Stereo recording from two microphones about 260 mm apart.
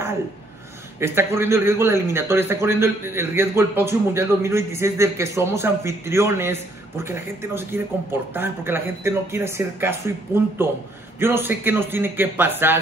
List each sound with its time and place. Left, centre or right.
0.9 s a man's voice: centre